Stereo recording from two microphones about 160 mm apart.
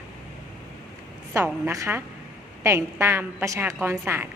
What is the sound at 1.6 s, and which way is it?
A woman's voice, 15° right (ahead or behind).